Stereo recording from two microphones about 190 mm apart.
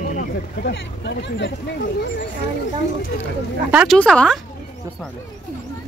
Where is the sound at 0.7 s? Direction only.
65° left (ahead or behind).